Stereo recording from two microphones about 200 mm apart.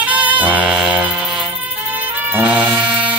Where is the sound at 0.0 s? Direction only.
5° right (ahead or behind).